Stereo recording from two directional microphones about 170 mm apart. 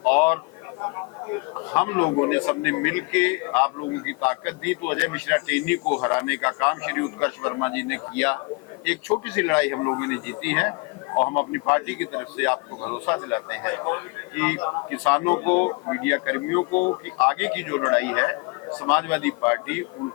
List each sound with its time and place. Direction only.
0.1 s a sound: 10° left (ahead or behind)
1.5 s a man's voice: 15° left (ahead or behind)
14.6 s speech: 25° left (ahead or behind)
15.0 s a man's voice: 15° left (ahead or behind)
16.7 s speech: 30° left (ahead or behind)
17.2 s a man's voice: 10° left (ahead or behind)